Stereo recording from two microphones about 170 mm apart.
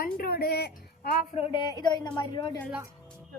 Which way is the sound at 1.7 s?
25° left (ahead or behind).